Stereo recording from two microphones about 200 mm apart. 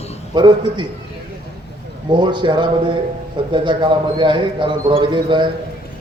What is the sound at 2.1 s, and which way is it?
A man's voice, 25° right (ahead or behind).